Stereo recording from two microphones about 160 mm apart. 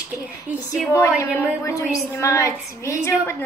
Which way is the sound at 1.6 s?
20° left (ahead or behind).